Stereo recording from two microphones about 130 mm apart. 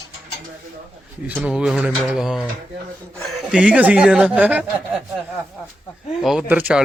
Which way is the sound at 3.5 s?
10° right (ahead or behind).